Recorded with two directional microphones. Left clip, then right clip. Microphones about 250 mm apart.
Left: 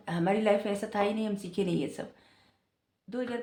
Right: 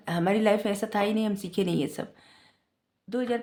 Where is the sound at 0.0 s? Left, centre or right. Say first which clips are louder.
Right 3 dB; right.